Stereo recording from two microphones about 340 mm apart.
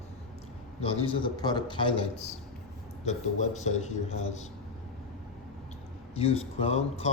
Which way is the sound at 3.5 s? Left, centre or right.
Centre.